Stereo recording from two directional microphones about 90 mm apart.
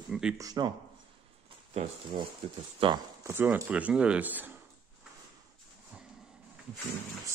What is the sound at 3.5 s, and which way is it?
Speech, 15° right (ahead or behind).